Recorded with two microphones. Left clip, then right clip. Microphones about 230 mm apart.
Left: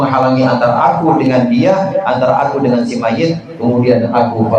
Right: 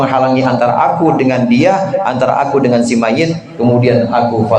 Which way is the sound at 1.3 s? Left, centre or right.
Right.